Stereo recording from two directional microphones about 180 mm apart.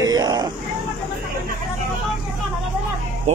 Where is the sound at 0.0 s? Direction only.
20° right (ahead or behind).